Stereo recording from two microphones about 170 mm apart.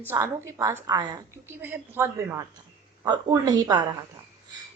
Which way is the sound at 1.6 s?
10° right (ahead or behind).